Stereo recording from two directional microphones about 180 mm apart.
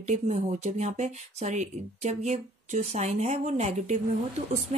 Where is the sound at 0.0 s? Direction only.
40° right (ahead or behind).